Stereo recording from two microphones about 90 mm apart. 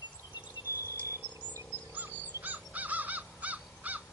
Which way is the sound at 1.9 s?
20° right (ahead or behind).